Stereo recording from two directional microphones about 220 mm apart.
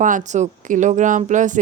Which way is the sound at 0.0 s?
35° right (ahead or behind).